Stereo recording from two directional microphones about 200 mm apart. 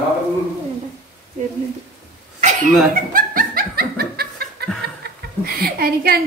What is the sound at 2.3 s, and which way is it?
Laughter, 40° right (ahead or behind).